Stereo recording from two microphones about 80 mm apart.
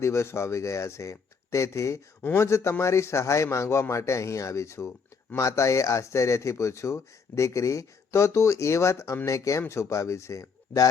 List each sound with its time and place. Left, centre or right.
0.0 s speech: left